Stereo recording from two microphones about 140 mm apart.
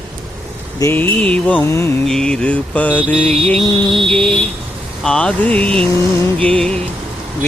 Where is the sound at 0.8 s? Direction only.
15° left (ahead or behind).